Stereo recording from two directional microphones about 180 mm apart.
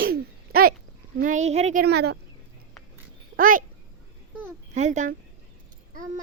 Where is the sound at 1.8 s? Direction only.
65° right (ahead or behind).